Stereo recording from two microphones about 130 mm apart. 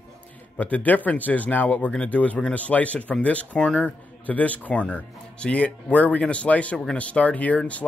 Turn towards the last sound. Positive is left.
turn(degrees=10)  # may be behind; listen again after turning